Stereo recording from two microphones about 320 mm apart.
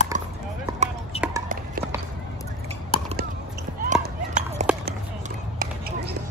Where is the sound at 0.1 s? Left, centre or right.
Right.